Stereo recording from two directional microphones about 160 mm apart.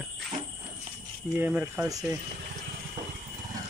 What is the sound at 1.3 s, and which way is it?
Speech, 10° right (ahead or behind).